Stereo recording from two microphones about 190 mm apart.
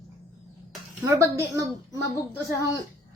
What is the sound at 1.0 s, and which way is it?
Speech, 15° right (ahead or behind).